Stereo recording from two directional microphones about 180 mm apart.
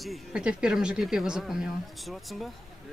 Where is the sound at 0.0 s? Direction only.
Centre (ahead or behind).